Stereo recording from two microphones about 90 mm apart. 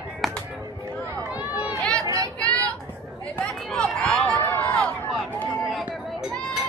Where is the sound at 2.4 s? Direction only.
40° right (ahead or behind).